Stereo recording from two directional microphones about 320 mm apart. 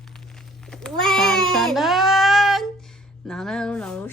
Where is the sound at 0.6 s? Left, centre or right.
Centre.